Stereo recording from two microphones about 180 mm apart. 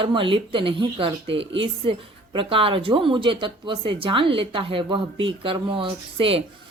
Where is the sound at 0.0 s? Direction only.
30° right (ahead or behind).